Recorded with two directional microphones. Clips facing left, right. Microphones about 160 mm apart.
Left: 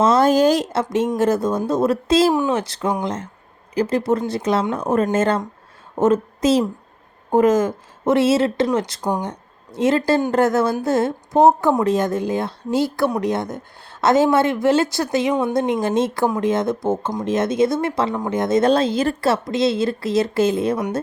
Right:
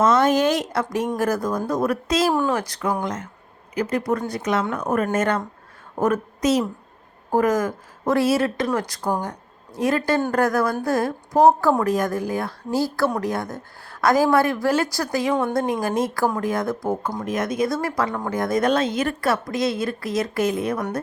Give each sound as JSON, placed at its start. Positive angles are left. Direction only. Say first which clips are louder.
{"t": 0.0, "sound": "speech", "louder": "left 3 dB", "side_deg": 30}
{"t": 2.3, "sound": "a woman's voice", "louder": "left 2 dB", "side_deg": 15}
{"t": 9.7, "sound": "speech", "louder": "left 4 dB", "side_deg": 25}